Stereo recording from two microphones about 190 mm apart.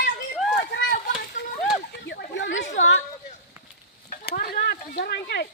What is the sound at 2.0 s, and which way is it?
Chatter, 70° left (ahead or behind).